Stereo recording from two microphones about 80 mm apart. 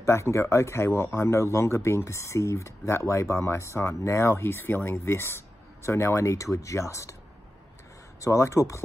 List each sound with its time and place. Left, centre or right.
0.0 s a man's voice: left
8.2 s a man's voice: left